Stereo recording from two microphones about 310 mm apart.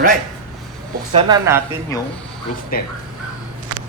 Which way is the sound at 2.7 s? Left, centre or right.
Left.